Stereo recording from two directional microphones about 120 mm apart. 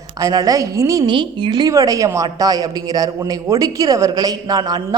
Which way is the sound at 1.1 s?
40° right (ahead or behind).